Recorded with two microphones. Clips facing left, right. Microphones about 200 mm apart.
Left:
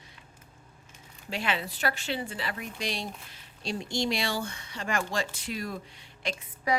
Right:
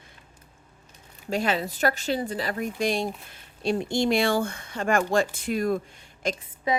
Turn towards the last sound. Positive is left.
turn(degrees=-20)  # may be behind; listen again after turning